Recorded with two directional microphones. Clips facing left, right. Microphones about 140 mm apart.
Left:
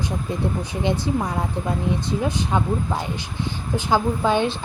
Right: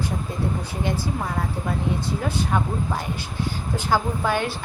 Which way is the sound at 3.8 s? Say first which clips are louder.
Left 3 dB; 20° left (ahead or behind).